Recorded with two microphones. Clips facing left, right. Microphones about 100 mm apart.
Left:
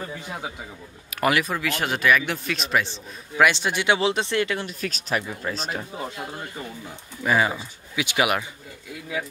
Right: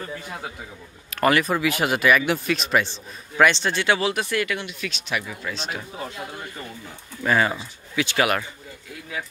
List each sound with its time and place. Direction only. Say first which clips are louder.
1.1 s speech: right 2 dB; 5° left (ahead or behind)
1.5 s a man's voice: right 4 dB; 5° right (ahead or behind); by 5.2 s 40° left (ahead or behind)
5.2 s speech: left 2 dB; 25° left (ahead or behind)
7.2 s a man's voice: right 1 dB; 10° left (ahead or behind)